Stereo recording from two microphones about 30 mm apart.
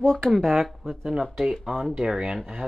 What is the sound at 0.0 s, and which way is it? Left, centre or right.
Speech, centre.